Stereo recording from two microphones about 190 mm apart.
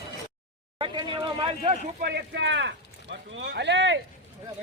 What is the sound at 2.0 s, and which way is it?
Speech, 60° right (ahead or behind).